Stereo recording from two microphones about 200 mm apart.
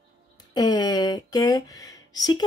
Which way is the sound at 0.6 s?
20° left (ahead or behind).